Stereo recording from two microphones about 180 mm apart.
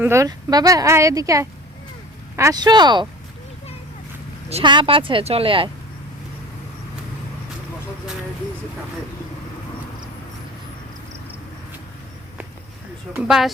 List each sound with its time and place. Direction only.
0.0 s a woman's voice: 15° right (ahead or behind)
4.4 s a woman's voice: 30° right (ahead or behind)
13.1 s speech: 5° right (ahead or behind)